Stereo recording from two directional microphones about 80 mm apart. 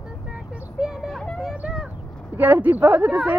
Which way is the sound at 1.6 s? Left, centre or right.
Centre.